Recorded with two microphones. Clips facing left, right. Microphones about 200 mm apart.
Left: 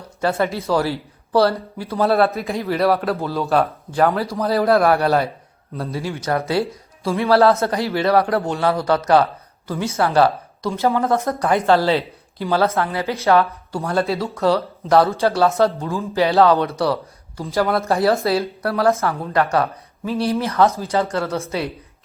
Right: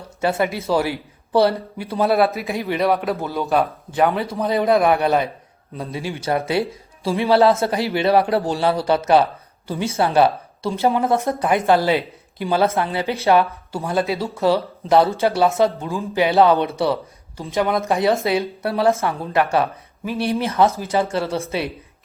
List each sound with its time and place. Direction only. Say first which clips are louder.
0.2 s speech: even; 20° right (ahead or behind)
2.0 s a man's voice: left 1 dB; centre (ahead or behind)
4.4 s a man's voice: left 1 dB; 20° right (ahead or behind)
7.3 s a man's voice: left 1 dB; centre (ahead or behind)
7.6 s a woman's voice: even; 25° right (ahead or behind)
13.7 s a man's voice: left 1 dB; centre (ahead or behind)
14.8 s speech: even; 25° right (ahead or behind)
17.4 s a man's voice: left 1 dB; centre (ahead or behind)
17.7 s speech: left 1 dB; 15° right (ahead or behind)
20.7 s speech: even; 15° right (ahead or behind)
21.1 s speech: even; 25° right (ahead or behind)